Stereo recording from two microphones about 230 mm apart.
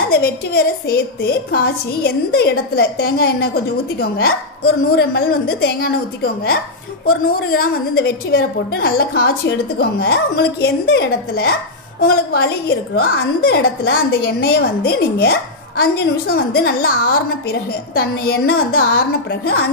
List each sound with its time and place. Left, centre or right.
0.1 s a woman's voice: left
4.9 s a woman's voice: left